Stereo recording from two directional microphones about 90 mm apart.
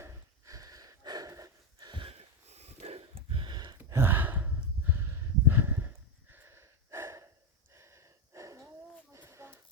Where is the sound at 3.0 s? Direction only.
90° right.